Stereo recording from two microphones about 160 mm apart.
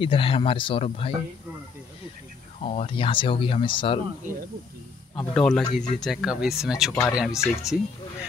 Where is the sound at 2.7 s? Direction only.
35° left (ahead or behind).